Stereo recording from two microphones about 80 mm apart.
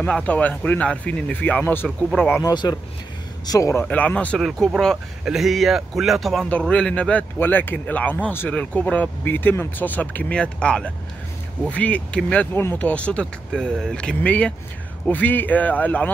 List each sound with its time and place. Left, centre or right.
0.0 s speech: centre
1.9 s a man's voice: centre
2.5 s speech: left
3.4 s a man's voice: left
3.8 s speech: centre
4.6 s speech: centre
5.2 s a man's voice: centre
6.5 s speech: centre
7.3 s speech: left
13.5 s speech: centre; by 16.1 s left